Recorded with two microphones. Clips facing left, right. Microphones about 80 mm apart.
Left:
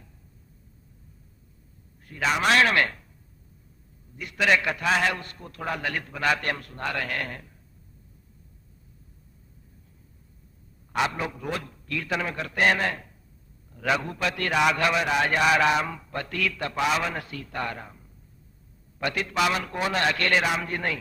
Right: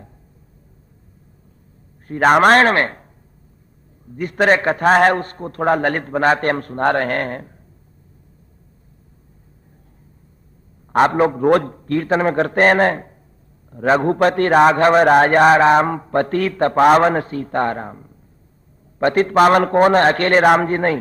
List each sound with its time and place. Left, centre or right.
2.0 s a man's voice: right
4.1 s a man's voice: right
10.9 s a man's voice: right